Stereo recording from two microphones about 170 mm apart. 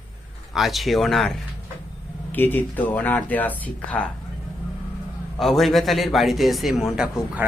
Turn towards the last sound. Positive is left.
turn(degrees=-5)  # may be behind; listen again after turning